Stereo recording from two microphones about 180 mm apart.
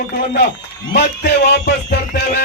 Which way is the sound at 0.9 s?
65° left (ahead or behind).